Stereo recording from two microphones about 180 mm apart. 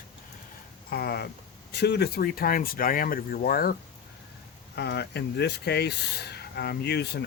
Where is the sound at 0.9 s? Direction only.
60° left (ahead or behind).